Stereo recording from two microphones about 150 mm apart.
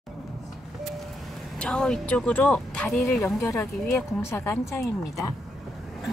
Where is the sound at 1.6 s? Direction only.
5° left (ahead or behind).